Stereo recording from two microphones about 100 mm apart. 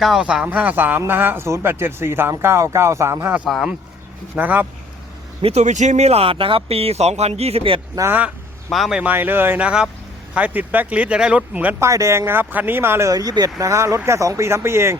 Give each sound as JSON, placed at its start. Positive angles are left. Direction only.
{"t": 0.0, "sound": "speech", "side_deg": -5}
{"t": 3.4, "sound": "speech", "side_deg": 0}
{"t": 4.4, "sound": "speech", "side_deg": -15}
{"t": 5.4, "sound": "speech", "side_deg": -90}
{"t": 8.7, "sound": "speech", "side_deg": 0}
{"t": 9.0, "sound": "speech", "side_deg": -15}
{"t": 11.9, "sound": "speech", "side_deg": -30}